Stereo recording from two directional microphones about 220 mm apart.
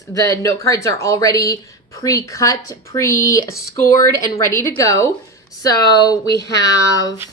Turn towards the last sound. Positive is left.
turn(degrees=15)  # may be behind; listen again after turning